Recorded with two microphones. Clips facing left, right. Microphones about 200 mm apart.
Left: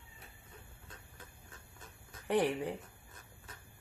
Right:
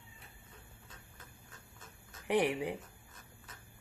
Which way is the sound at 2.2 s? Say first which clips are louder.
Even; 15° right (ahead or behind).